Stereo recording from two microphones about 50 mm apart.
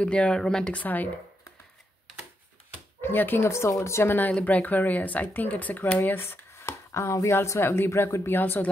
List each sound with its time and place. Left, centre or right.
0.0 s speech: left
0.7 s speech: left
3.0 s speech: left
3.4 s speech: left
3.8 s speech: left
4.1 s speech: left
6.0 s speech: left
7.6 s speech: left
8.3 s speech: left